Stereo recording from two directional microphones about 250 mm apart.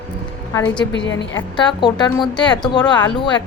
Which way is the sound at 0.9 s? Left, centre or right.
Left.